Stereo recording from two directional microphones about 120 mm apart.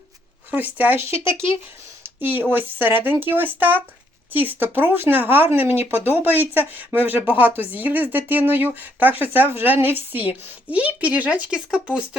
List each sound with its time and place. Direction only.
0.5 s speech: 15° right (ahead or behind)
1.1 s speech: 45° left (ahead or behind)
2.0 s speech: 15° right (ahead or behind)